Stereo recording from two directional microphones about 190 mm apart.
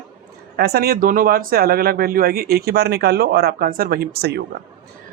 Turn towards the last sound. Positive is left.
turn(degrees=-60)  # may be behind; listen again after turning